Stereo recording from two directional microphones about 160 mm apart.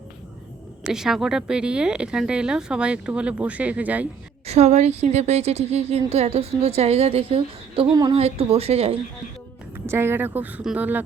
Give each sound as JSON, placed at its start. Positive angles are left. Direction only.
{"t": 0.9, "sound": "speech", "side_deg": 0}
{"t": 4.4, "sound": "a woman's voice", "side_deg": -40}
{"t": 9.7, "sound": "speech", "side_deg": -15}